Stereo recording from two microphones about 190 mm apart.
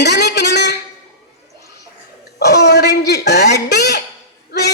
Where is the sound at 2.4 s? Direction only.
60° left (ahead or behind).